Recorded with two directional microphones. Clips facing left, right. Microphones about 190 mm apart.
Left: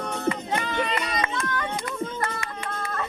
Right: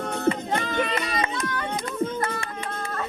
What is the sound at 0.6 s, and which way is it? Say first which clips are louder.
Run: right 1 dB; 45° right (ahead or behind).